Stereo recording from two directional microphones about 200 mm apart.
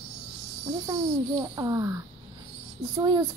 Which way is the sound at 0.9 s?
20° right (ahead or behind).